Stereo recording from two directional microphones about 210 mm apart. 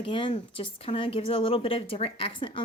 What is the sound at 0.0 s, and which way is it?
Speech, 25° left (ahead or behind).